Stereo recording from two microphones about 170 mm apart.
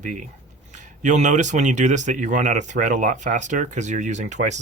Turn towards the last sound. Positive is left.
turn(degrees=-45)  # may be behind; listen again after turning